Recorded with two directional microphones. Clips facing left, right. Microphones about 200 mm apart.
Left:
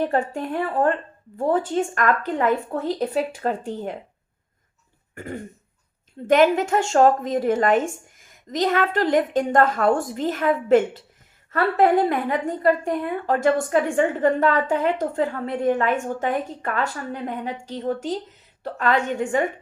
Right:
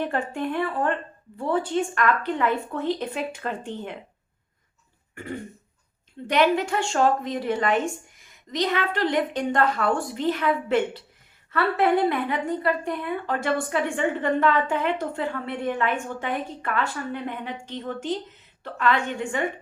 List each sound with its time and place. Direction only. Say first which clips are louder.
0.0 s a woman's voice: left 3 dB; 40° left (ahead or behind)
5.1 s throat clearing: left 1 dB; 45° left (ahead or behind)
6.2 s a woman's voice: left 4 dB; 45° left (ahead or behind)